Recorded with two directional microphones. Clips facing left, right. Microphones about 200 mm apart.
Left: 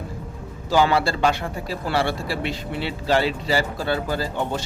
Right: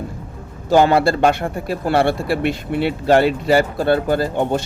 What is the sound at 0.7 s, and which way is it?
Speech, 55° right (ahead or behind).